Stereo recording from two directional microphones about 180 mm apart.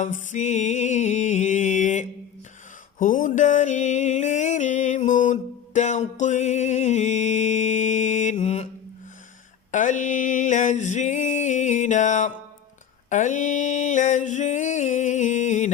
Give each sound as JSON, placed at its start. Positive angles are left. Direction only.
{"t": 0.0, "sound": "music", "side_deg": 45}
{"t": 3.0, "sound": "a sound", "side_deg": 45}
{"t": 9.7, "sound": "music", "side_deg": 45}
{"t": 13.1, "sound": "mantra", "side_deg": 45}